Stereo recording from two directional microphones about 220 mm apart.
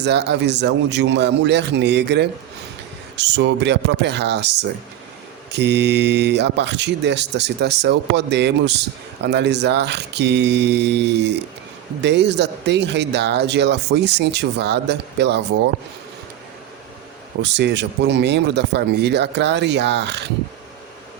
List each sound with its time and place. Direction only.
0.0 s speech: 50° right (ahead or behind)
17.4 s speech: 50° right (ahead or behind)